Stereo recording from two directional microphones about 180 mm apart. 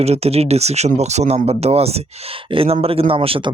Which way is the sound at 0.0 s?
35° right (ahead or behind).